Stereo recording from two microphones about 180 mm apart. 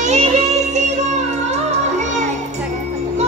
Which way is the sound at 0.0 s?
40° right (ahead or behind).